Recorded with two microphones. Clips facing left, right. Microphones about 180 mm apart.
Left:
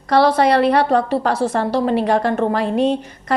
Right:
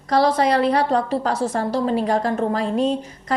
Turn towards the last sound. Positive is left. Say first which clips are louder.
# left 3 dB
turn(degrees=65)  # may be behind; listen again after turning